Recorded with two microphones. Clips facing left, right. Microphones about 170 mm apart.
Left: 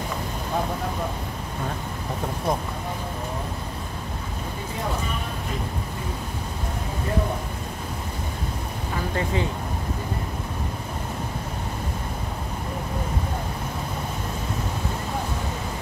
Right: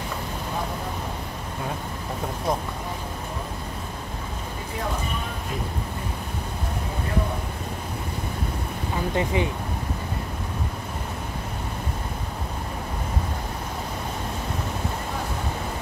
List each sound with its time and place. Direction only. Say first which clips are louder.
9.1 s speech: right 2 dB; 15° right (ahead or behind)